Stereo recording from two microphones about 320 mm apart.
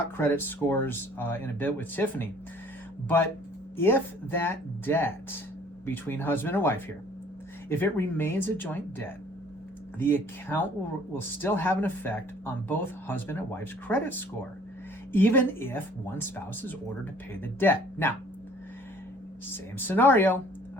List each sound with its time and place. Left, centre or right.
0.2 s speech: centre
3.8 s speech: centre
19.8 s speech: centre